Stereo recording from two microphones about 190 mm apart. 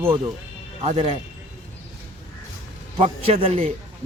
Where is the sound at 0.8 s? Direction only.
30° right (ahead or behind).